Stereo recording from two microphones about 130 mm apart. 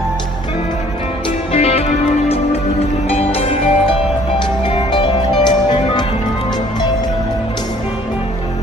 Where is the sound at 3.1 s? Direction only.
50° left (ahead or behind); by 6.0 s 35° left (ahead or behind).